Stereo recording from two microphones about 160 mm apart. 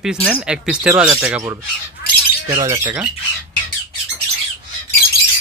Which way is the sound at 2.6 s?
20° right (ahead or behind).